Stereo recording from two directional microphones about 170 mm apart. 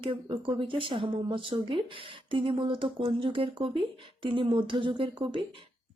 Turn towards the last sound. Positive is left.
turn(degrees=-30)  # may be behind; listen again after turning